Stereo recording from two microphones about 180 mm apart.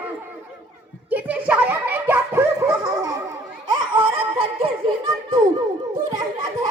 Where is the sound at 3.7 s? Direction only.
30° right (ahead or behind).